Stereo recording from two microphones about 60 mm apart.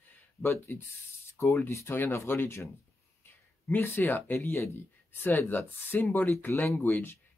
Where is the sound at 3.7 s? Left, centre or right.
Left.